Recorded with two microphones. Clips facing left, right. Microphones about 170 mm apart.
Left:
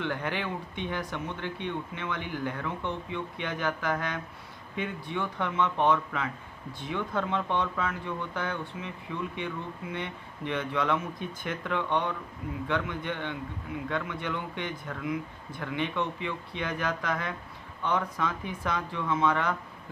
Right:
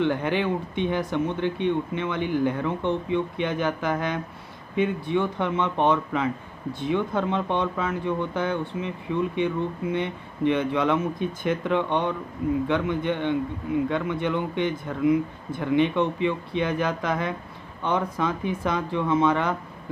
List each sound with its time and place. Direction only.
0.0 s speech: 20° right (ahead or behind)